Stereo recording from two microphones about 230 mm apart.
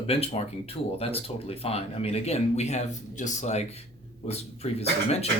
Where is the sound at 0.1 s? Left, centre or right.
Left.